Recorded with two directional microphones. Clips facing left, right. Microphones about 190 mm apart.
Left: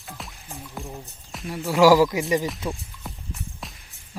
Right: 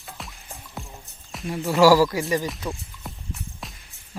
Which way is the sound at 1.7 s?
15° left (ahead or behind).